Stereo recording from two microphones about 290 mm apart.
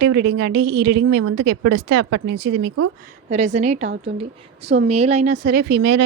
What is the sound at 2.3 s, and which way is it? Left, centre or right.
Speech, right.